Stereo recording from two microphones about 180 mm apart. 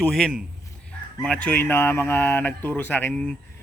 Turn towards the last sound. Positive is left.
turn(degrees=5)  # may be behind; listen again after turning